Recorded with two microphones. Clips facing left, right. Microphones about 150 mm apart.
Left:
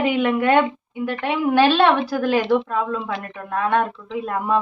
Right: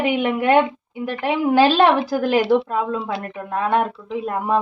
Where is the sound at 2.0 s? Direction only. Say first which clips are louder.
Right 2 dB; 25° right (ahead or behind).